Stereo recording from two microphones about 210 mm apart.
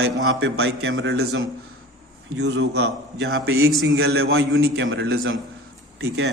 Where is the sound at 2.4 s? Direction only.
55° right (ahead or behind).